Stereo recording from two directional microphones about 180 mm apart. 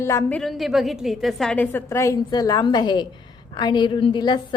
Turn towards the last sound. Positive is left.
turn(degrees=25)  # may be behind; listen again after turning